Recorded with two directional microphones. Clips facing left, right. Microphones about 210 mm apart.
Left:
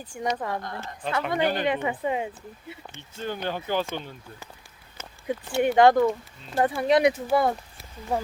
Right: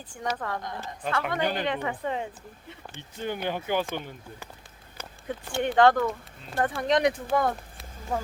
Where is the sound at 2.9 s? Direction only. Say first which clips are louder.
Right 1 dB; 15° right (ahead or behind).